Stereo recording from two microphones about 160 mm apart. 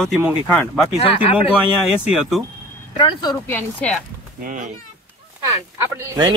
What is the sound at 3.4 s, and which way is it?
Speech, 10° left (ahead or behind).